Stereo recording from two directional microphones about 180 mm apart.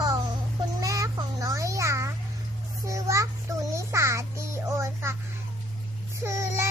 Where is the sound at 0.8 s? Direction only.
20° right (ahead or behind).